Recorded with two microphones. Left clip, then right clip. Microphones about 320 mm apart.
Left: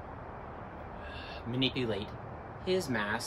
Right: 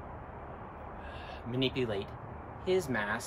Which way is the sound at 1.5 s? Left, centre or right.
Centre.